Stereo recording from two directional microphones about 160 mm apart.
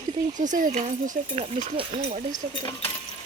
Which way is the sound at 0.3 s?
55° right (ahead or behind).